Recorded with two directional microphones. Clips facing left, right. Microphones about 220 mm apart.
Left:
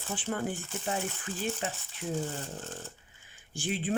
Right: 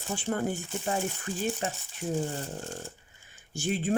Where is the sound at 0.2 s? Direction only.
45° right (ahead or behind).